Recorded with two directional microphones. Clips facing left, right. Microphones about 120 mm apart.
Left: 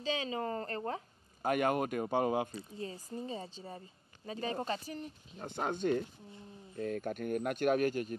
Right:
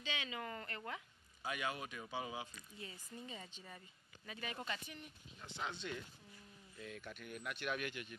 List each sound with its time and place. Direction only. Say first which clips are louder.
0.0 s speech: left 10 dB; 35° left (ahead or behind)
1.4 s speech: left 12 dB; 50° left (ahead or behind)
2.5 s speech: left 12 dB; 35° left (ahead or behind)